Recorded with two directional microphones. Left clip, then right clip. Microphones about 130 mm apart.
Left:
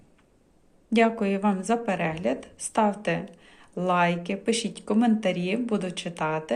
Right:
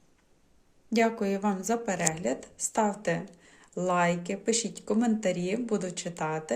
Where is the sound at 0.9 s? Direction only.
20° right (ahead or behind).